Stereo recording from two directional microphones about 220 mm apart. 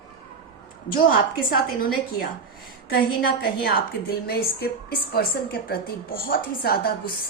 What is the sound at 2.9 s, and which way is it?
A woman's voice, 45° left (ahead or behind).